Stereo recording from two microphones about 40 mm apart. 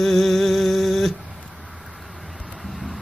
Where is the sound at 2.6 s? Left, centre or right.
Centre.